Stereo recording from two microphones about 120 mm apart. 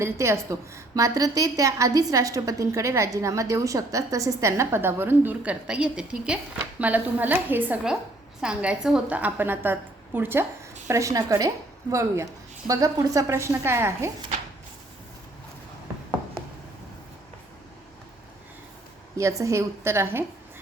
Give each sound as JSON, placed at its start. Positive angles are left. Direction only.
{"t": 0.0, "sound": "a woman's voice", "side_deg": -25}
{"t": 19.1, "sound": "a woman's voice", "side_deg": -25}